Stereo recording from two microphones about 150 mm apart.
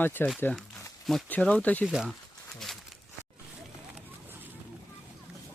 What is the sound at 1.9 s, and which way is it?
Speech, 5° right (ahead or behind).